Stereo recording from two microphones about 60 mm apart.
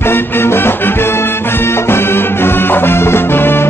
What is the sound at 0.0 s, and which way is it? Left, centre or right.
Music, left.